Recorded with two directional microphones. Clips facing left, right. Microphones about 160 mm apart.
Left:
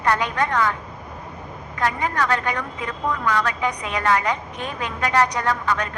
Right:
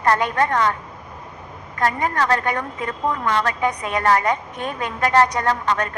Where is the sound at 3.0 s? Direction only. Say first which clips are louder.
Right 1 dB; 25° right (ahead or behind).